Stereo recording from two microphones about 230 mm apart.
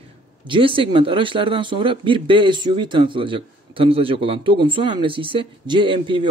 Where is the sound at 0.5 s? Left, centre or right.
Right.